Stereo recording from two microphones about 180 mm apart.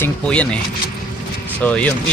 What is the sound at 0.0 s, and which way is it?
Speech, 5° left (ahead or behind).